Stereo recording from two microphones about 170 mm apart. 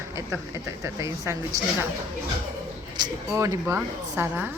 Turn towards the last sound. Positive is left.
turn(degrees=-10)  # may be behind; listen again after turning